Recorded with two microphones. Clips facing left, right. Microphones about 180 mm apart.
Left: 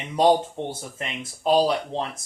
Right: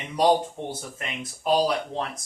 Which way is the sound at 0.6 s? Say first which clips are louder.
Left 1 dB; 25° left (ahead or behind).